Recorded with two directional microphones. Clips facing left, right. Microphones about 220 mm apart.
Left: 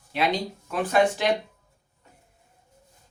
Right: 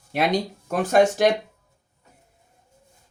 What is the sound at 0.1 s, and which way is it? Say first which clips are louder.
Speech: right 3 dB; 45° right (ahead or behind).